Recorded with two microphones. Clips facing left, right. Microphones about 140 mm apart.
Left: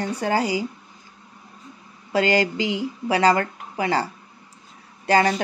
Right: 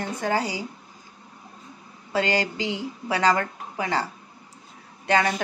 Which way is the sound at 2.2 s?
30° right (ahead or behind).